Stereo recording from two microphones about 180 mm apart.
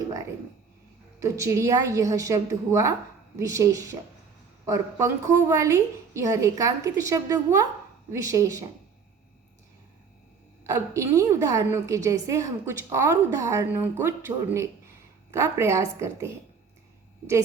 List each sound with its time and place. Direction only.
1.2 s a woman's voice: 15° right (ahead or behind)
10.7 s a woman's voice: 15° right (ahead or behind)